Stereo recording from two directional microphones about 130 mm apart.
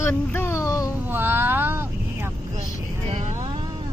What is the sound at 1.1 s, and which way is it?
Vehicle, 15° right (ahead or behind).